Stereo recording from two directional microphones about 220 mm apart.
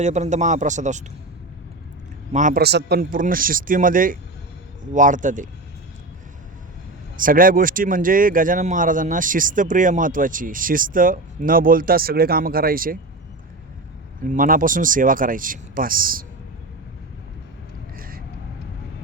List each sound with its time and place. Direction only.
0.0 s speech: 30° right (ahead or behind)
2.3 s speech: 35° right (ahead or behind)
7.2 s speech: 40° right (ahead or behind)
14.3 s speech: 40° right (ahead or behind)
17.9 s a sound: 40° right (ahead or behind)